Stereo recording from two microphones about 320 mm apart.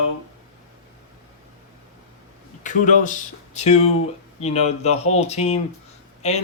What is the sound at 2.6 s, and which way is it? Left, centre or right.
Speech, left.